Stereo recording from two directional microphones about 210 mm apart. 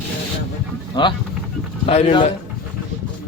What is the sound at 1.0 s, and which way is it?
Speech, 20° left (ahead or behind).